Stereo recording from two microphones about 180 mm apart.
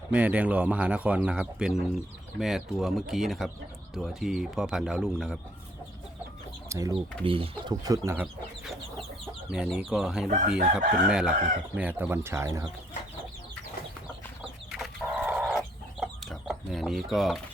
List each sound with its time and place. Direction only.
0.1 s speech: 10° right (ahead or behind)
6.7 s speech: 20° right (ahead or behind)
8.6 s chicken: centre (ahead or behind)
9.5 s speech: 5° right (ahead or behind)
14.7 s chicken: centre (ahead or behind)